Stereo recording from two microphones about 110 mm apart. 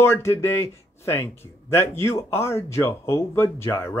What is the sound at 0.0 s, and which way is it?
Speech, 25° left (ahead or behind).